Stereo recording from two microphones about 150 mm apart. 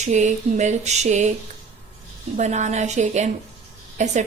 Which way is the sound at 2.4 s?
50° right (ahead or behind).